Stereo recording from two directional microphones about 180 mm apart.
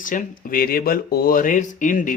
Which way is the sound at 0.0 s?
45° left (ahead or behind).